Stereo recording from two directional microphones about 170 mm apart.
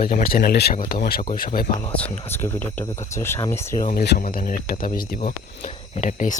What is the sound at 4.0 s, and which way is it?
Speech, 65° left (ahead or behind).